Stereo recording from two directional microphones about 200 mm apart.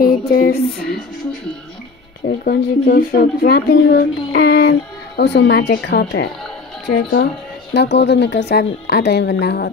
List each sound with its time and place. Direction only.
0.2 s speech: 50° left (ahead or behind)
2.2 s a woman's voice: 45° left (ahead or behind)